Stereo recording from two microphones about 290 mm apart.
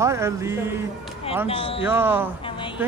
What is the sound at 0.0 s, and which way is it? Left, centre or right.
Speech, centre.